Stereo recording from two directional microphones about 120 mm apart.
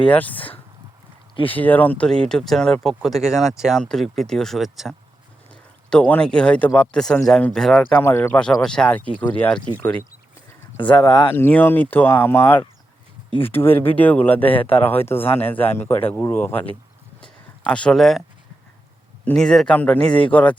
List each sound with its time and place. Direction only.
0.1 s speech: 15° left (ahead or behind)
5.9 s speech: 10° left (ahead or behind)
8.0 s speech: 20° left (ahead or behind)
8.4 s speech: 5° left (ahead or behind)
10.8 s speech: 40° left (ahead or behind)
11.3 s speech: 20° left (ahead or behind)
17.2 s a sound: 5° left (ahead or behind)
19.2 s speech: 5° left (ahead or behind)